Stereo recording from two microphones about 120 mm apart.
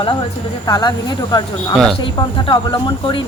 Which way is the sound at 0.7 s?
35° left (ahead or behind).